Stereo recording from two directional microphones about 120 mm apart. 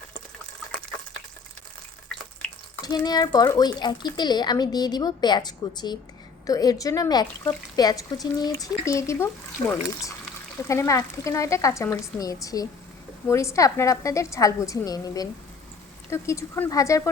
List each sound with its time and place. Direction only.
2.1 s water: 5° left (ahead or behind)
2.8 s speech: 35° left (ahead or behind)
10.7 s speech: 25° left (ahead or behind)